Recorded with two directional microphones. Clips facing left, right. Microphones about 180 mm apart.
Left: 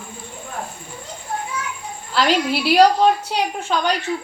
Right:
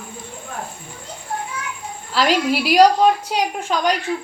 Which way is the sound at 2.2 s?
10° right (ahead or behind).